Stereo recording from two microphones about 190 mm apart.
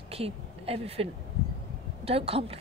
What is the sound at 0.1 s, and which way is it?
Speech, 30° right (ahead or behind).